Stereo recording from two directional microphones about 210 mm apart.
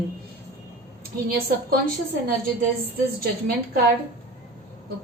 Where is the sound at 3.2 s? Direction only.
45° right (ahead or behind).